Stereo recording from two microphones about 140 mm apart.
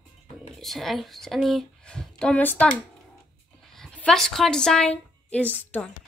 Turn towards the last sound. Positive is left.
turn(degrees=10)  # may be behind; listen again after turning